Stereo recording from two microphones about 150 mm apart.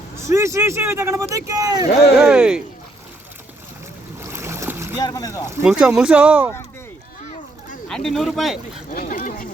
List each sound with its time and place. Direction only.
0.3 s speech: 20° right (ahead or behind)
2.1 s speech: 5° right (ahead or behind)
4.2 s boat: 15° right (ahead or behind)
4.9 s speech: 25° left (ahead or behind)
5.6 s speech: 5° right (ahead or behind)
7.9 s speech: centre (ahead or behind)
8.9 s speech: 65° left (ahead or behind)